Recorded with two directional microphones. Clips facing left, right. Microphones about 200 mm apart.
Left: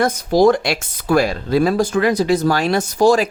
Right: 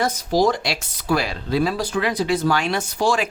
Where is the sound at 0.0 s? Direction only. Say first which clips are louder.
Left 6 dB; 55° left (ahead or behind).